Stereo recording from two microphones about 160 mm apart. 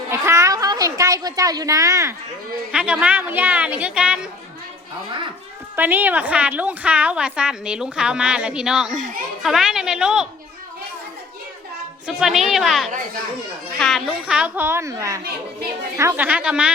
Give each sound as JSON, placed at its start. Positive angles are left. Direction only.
{"t": 0.1, "sound": "a child's voice", "side_deg": -20}
{"t": 2.7, "sound": "a woman's voice", "side_deg": -10}
{"t": 5.7, "sound": "a woman's voice", "side_deg": -10}
{"t": 12.0, "sound": "a woman's voice", "side_deg": 0}